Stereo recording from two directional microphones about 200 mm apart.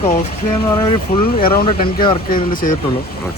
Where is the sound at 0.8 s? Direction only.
25° left (ahead or behind).